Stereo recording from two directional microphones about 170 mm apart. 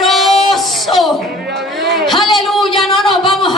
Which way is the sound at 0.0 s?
Centre (ahead or behind).